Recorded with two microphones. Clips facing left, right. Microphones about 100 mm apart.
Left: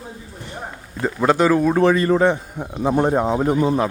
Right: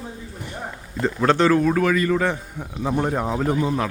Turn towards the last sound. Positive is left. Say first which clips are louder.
# left 4 dB
turn(degrees=30)  # may be behind; listen again after turning